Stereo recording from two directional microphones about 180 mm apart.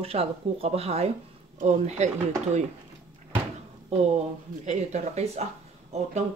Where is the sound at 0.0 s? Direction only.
35° right (ahead or behind).